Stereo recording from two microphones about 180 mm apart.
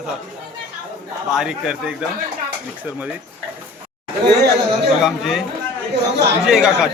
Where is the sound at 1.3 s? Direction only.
5° right (ahead or behind).